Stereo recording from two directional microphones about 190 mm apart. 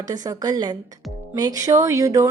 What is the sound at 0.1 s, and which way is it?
A woman's voice, 20° right (ahead or behind).